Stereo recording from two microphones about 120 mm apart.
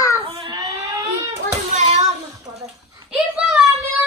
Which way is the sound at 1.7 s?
75° right (ahead or behind).